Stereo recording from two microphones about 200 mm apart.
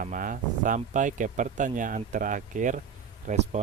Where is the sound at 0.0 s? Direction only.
40° right (ahead or behind).